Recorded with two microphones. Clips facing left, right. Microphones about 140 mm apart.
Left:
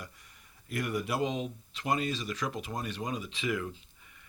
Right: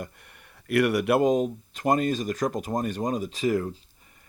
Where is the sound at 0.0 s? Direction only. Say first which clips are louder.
Right 9 dB; 60° right (ahead or behind).